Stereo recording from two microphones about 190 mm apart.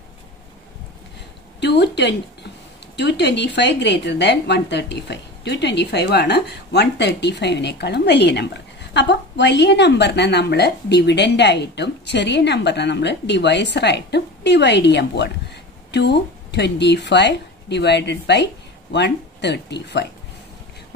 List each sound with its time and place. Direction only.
1.6 s a woman's voice: 65° left (ahead or behind)